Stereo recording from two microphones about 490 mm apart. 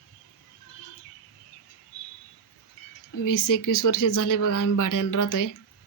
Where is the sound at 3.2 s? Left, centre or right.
Left.